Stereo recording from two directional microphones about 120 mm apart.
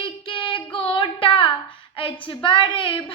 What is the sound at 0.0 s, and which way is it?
Child singing, 45° left (ahead or behind).